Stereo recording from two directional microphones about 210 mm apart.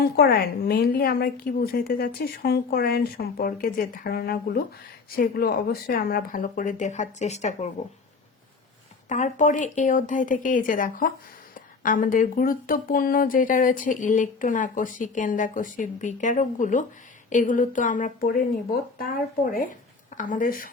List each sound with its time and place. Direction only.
0.0 s a woman's voice: 45° left (ahead or behind)
9.0 s a woman's voice: 35° left (ahead or behind)
20.1 s speech: 40° left (ahead or behind)